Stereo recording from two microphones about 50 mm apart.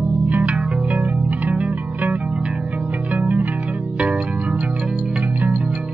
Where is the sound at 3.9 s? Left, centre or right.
Right.